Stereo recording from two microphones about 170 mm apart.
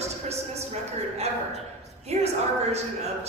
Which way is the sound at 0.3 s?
40° right (ahead or behind).